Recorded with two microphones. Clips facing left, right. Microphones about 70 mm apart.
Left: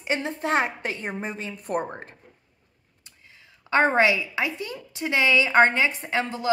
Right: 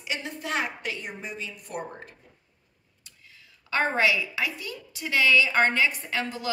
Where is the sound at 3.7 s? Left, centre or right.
Left.